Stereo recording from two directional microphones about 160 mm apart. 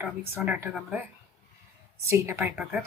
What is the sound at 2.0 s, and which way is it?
Speech, 15° right (ahead or behind).